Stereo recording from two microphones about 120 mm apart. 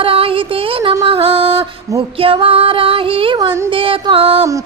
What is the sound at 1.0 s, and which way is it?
Music, 50° right (ahead or behind).